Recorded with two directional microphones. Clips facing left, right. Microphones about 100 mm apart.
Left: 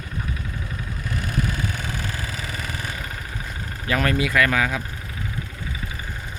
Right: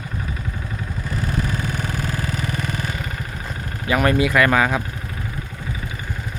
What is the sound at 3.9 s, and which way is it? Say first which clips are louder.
Speech: right 4 dB; 15° right (ahead or behind).